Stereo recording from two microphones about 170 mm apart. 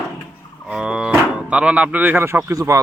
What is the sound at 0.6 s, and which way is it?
Speech, 5° right (ahead or behind).